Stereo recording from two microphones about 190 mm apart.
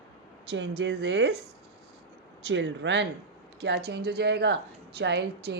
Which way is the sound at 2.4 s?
70° right (ahead or behind).